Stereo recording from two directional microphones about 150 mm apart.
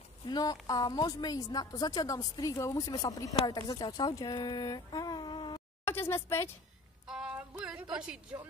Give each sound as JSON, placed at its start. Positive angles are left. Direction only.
{"t": 0.3, "sound": "a woman's voice", "side_deg": 25}
{"t": 5.9, "sound": "speech", "side_deg": 15}
{"t": 7.1, "sound": "music", "side_deg": -5}
{"t": 7.9, "sound": "a woman's voice", "side_deg": -5}